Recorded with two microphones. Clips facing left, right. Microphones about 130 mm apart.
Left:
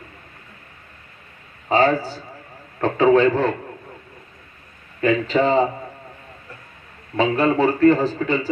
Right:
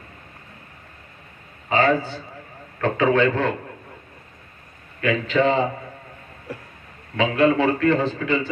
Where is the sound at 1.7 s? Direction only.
35° left (ahead or behind).